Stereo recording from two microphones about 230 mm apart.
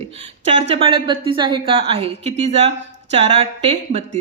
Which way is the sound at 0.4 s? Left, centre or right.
Right.